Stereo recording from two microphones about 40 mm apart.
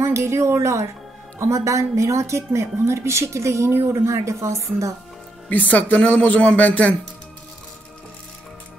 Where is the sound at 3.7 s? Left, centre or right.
Right.